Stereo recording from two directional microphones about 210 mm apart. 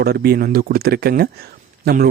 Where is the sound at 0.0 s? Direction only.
50° right (ahead or behind).